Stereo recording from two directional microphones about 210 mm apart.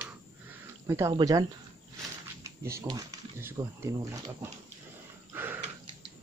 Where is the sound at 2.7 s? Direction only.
15° right (ahead or behind).